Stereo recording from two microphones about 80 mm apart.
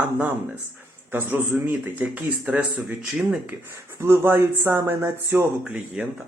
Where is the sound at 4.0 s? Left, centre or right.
Right.